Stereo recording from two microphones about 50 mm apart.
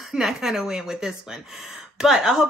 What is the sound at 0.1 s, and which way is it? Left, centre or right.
Speech, centre.